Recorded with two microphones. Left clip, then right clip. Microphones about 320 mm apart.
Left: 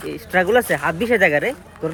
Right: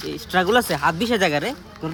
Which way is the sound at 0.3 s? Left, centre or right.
Centre.